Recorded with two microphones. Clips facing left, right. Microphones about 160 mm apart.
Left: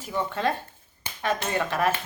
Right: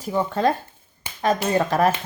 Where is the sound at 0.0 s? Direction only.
40° right (ahead or behind).